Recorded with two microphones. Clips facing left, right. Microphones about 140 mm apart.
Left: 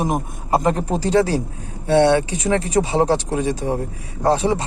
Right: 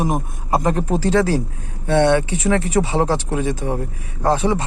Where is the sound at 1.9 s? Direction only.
35° left (ahead or behind).